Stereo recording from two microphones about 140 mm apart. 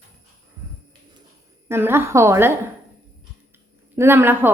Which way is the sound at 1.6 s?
15° right (ahead or behind).